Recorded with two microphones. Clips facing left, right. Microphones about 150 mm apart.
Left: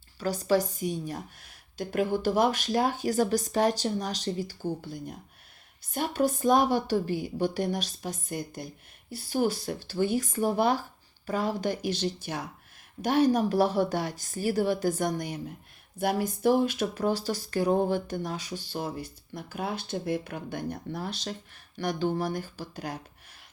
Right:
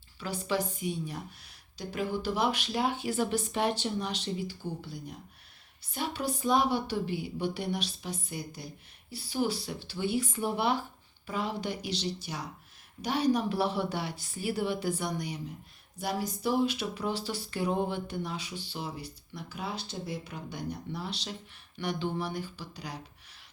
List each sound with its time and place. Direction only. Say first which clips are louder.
0.2 s speech: left 6 dB; 40° left (ahead or behind)